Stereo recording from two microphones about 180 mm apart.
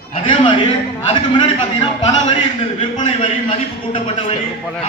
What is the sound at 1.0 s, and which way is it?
A man's voice, 25° left (ahead or behind).